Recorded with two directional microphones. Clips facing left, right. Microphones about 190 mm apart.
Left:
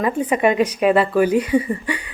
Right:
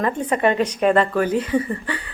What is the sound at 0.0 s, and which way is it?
Speech, 10° left (ahead or behind).